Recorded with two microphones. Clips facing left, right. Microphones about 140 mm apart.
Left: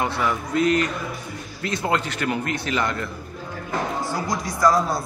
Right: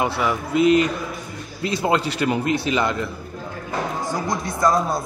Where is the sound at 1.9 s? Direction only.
15° right (ahead or behind).